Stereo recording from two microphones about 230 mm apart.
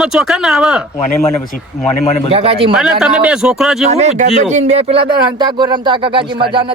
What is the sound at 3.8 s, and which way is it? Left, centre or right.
Speech, right.